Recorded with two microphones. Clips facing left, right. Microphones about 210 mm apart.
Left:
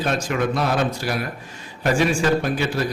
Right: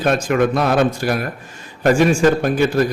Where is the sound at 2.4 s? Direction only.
50° right (ahead or behind).